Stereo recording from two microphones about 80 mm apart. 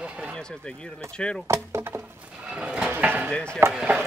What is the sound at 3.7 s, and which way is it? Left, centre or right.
Speech, centre.